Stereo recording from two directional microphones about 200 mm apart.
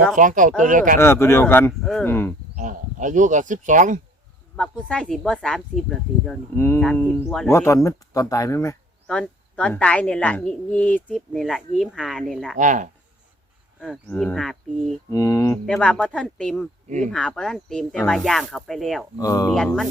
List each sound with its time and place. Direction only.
0.2 s speech: 40° right (ahead or behind)
0.9 s speech: 10° left (ahead or behind)
1.8 s a woman's voice: centre (ahead or behind)
2.0 s speech: 10° left (ahead or behind)
2.6 s speech: 40° right (ahead or behind)
4.5 s a woman's voice: 5° left (ahead or behind)
9.0 s a woman's voice: 5° left (ahead or behind)
12.5 s speech: 40° right (ahead or behind)
14.1 s a woman's voice: 5° left (ahead or behind)
15.1 s speech: 15° left (ahead or behind)
15.6 s a woman's voice: 5° left (ahead or behind)
19.2 s speech: 20° left (ahead or behind)
19.5 s a woman's voice: centre (ahead or behind)